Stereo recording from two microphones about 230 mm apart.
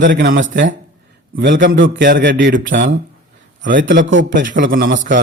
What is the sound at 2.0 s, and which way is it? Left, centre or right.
Speech, right.